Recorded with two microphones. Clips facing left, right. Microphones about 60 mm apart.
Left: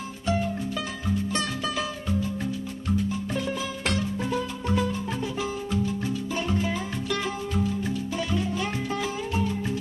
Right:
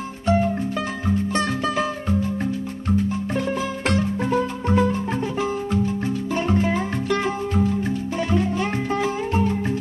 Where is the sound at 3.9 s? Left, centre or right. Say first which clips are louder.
Right 7 dB; right.